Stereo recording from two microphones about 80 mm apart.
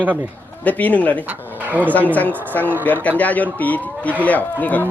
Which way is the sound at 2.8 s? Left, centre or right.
Centre.